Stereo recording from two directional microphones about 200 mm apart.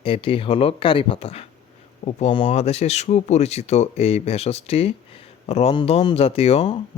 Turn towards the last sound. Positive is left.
turn(degrees=30)  # may be behind; listen again after turning